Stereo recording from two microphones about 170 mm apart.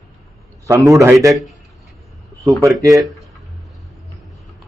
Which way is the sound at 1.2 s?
Centre (ahead or behind).